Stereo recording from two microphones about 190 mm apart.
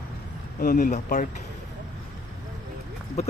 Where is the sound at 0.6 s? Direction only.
45° left (ahead or behind).